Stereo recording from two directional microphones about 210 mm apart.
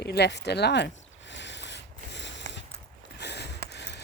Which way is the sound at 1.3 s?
55° left (ahead or behind).